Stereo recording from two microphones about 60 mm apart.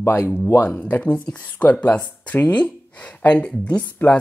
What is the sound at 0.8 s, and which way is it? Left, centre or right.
Speech, left.